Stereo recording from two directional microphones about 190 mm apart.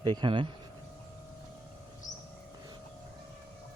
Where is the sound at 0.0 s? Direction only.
20° right (ahead or behind).